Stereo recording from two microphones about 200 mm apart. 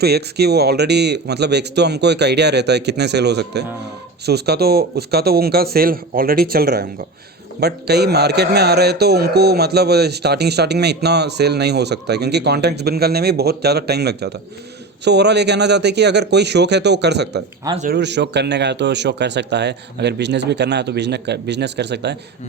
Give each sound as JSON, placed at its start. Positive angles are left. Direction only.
{"t": 0.0, "sound": "a man's voice", "side_deg": -55}